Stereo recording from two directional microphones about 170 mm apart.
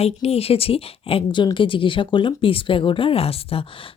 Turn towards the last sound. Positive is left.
turn(degrees=30)  # may be behind; listen again after turning